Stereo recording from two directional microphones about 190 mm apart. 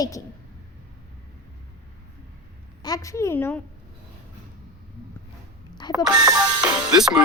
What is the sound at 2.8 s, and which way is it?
Speech, 20° left (ahead or behind).